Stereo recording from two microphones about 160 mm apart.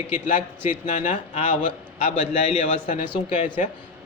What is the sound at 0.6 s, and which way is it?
A man's voice, 50° left (ahead or behind).